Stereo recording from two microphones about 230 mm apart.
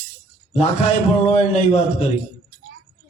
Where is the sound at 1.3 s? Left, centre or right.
Left.